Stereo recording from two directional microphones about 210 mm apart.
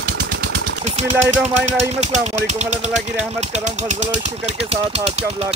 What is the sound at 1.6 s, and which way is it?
Speech, 35° right (ahead or behind).